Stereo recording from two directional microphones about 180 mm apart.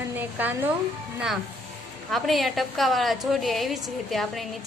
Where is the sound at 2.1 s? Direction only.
Centre (ahead or behind).